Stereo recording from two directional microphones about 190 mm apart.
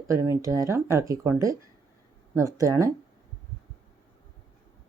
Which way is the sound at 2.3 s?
15° right (ahead or behind).